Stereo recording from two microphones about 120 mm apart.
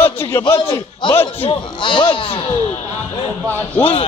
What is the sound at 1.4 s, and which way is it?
Speech, 45° left (ahead or behind).